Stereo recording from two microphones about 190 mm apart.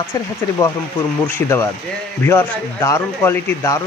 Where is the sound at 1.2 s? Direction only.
15° left (ahead or behind).